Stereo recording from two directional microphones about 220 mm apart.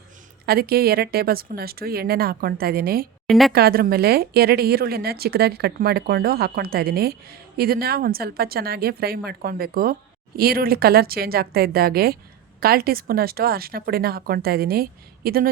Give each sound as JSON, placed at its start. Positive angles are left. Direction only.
{"t": 0.4, "sound": "a woman's voice", "side_deg": -45}
{"t": 3.2, "sound": "a woman's voice", "side_deg": 0}
{"t": 3.5, "sound": "a woman's voice", "side_deg": -45}